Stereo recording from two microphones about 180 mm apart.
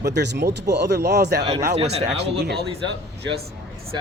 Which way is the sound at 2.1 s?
70° right (ahead or behind).